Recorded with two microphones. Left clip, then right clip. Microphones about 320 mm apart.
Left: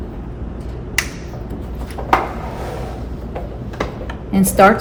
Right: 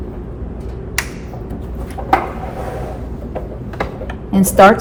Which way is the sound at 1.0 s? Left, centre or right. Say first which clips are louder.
Left 1 dB; centre.